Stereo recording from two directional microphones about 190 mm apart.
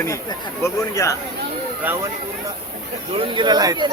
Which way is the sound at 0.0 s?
15° left (ahead or behind).